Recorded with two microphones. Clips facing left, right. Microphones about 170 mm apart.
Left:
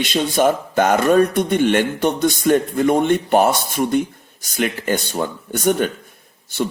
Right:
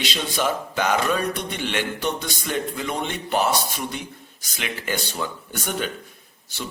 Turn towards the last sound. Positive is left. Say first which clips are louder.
# left 12 dB
turn(degrees=55)  # may be behind; listen again after turning